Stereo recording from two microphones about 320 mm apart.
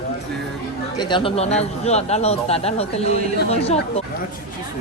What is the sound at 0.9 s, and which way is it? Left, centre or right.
A man's voice, centre.